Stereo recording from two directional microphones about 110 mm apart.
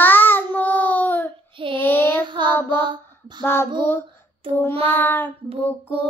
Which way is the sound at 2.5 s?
20° left (ahead or behind).